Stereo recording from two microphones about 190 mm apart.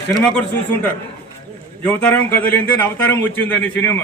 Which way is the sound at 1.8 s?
10° left (ahead or behind).